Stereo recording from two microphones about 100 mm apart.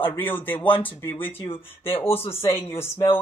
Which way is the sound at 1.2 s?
65° left (ahead or behind).